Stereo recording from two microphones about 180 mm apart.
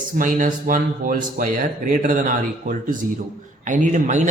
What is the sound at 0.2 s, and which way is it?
Speech, 50° right (ahead or behind).